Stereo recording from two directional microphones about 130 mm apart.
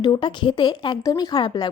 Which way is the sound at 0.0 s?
35° left (ahead or behind).